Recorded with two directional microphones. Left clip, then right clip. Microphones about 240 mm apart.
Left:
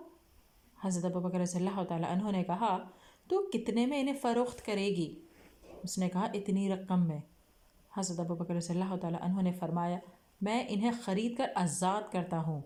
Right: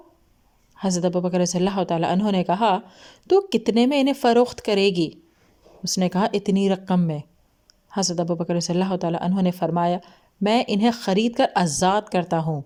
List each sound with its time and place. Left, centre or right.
0.8 s a woman's voice: right